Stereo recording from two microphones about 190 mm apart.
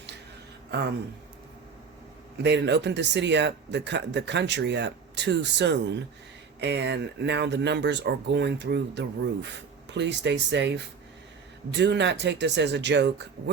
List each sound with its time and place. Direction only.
0.7 s speech: 60° right (ahead or behind)
2.4 s speech: 65° right (ahead or behind)